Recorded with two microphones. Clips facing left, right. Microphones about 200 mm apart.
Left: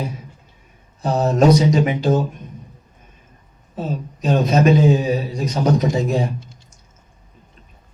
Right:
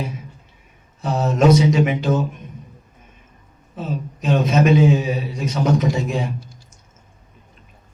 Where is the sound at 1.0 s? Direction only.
35° left (ahead or behind).